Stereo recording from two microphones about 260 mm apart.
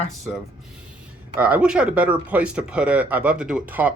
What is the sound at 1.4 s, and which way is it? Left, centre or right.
Speech, centre.